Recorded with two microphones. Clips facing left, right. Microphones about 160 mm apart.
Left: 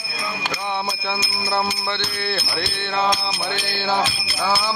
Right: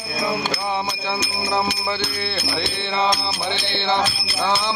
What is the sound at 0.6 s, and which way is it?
Music, centre (ahead or behind).